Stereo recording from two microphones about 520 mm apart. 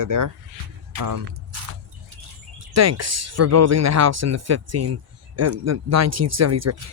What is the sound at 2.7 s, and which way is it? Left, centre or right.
Speech, right.